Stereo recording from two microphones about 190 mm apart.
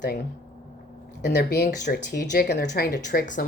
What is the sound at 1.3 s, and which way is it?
A woman's voice, 55° left (ahead or behind).